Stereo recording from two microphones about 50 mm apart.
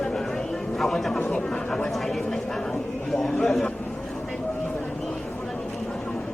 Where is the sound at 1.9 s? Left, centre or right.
Centre.